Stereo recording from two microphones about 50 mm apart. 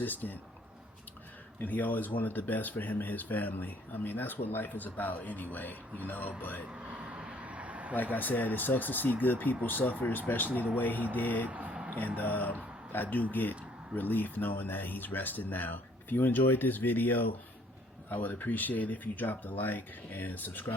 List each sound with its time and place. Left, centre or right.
0.0 s speech: left
1.5 s speech: left
6.7 s a sound: right
8.1 s speech: left
11.4 s speech: right
11.9 s speech: left